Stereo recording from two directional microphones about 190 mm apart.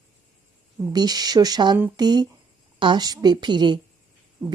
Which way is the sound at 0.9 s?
20° right (ahead or behind).